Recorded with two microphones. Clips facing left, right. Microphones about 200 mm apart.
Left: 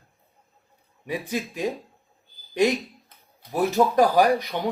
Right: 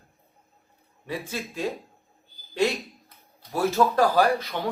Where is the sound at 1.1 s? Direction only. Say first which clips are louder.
Left 4 dB; 15° left (ahead or behind).